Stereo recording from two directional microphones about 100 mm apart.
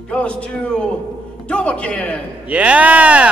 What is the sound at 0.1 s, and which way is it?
Speech, 10° left (ahead or behind).